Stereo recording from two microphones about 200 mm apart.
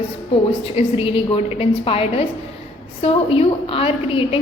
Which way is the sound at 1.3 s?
30° left (ahead or behind).